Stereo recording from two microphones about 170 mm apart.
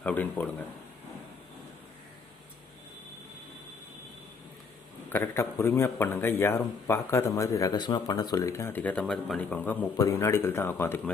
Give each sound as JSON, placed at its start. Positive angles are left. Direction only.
{"t": 0.0, "sound": "speech", "side_deg": 10}
{"t": 5.0, "sound": "speech", "side_deg": 15}